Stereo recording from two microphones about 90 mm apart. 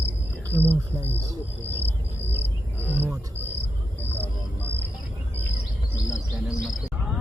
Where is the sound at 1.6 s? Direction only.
20° left (ahead or behind).